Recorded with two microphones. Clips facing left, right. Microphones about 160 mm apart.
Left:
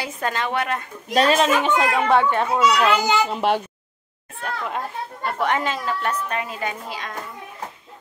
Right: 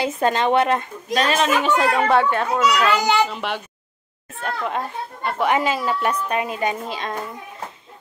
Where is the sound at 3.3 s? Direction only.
40° left (ahead or behind).